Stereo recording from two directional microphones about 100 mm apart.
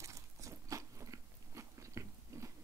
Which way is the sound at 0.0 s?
30° right (ahead or behind).